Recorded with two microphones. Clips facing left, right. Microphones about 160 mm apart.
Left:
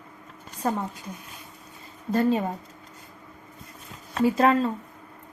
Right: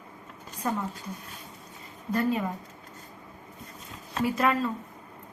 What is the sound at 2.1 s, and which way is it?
Speech, 30° left (ahead or behind).